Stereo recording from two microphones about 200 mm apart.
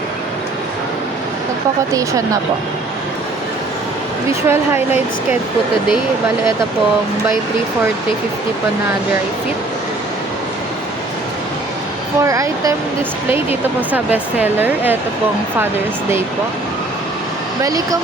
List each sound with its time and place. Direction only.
1.9 s speech: 15° right (ahead or behind)
4.3 s speech: 10° right (ahead or behind)
12.2 s speech: 15° right (ahead or behind)
17.6 s speech: 15° right (ahead or behind)